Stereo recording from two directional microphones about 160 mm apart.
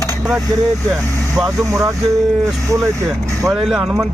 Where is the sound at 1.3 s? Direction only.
20° right (ahead or behind).